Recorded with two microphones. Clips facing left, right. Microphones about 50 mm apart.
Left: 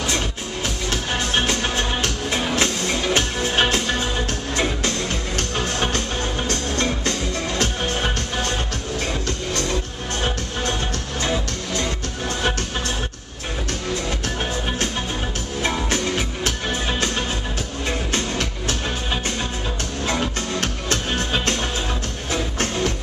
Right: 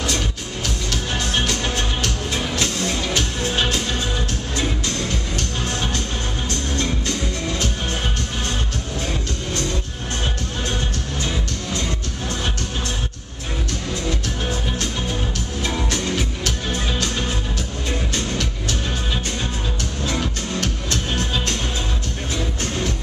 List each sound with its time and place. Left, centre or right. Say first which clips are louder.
0.8 s music: left 1 dB; left
6.8 s music: left 1 dB; left
15.6 s music: left 2 dB; left
18.1 s music: left 1 dB; left
20.1 s music: left 2 dB; left